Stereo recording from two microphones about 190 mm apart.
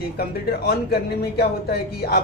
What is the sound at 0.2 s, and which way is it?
A man's voice, 55° left (ahead or behind).